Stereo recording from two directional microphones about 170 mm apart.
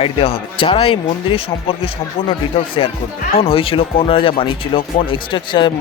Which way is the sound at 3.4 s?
35° left (ahead or behind).